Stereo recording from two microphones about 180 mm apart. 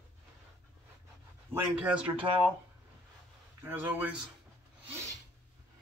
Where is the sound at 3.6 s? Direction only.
10° right (ahead or behind).